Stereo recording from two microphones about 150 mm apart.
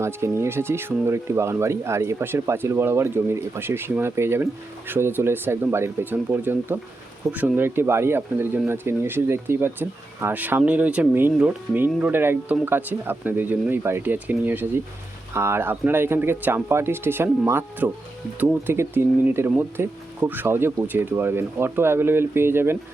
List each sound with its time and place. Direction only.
0.0 s speech: 20° right (ahead or behind)